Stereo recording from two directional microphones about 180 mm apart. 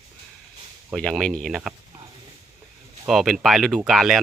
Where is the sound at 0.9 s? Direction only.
Centre (ahead or behind).